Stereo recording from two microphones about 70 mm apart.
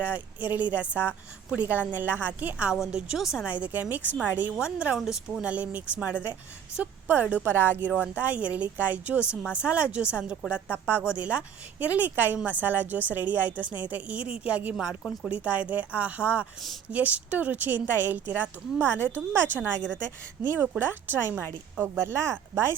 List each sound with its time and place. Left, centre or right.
0.0 s a woman's voice: right
2.9 s a woman's voice: centre
3.5 s a woman's voice: right
7.6 s speech: left
8.1 s a woman's voice: right
14.8 s a woman's voice: centre
15.3 s a woman's voice: right